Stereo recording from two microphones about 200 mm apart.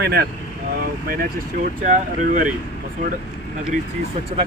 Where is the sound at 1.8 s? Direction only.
40° right (ahead or behind).